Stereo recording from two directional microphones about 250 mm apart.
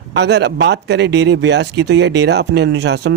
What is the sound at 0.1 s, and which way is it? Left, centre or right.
Speech, right.